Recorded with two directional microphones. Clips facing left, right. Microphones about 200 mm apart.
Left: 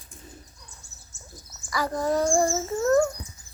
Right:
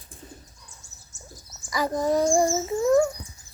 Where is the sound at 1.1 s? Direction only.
45° right (ahead or behind).